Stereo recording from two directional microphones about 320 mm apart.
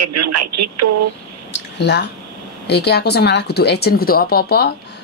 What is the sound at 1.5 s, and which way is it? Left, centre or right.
Speech, left.